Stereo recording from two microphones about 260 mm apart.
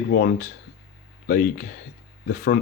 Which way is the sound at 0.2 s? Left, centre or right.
Left.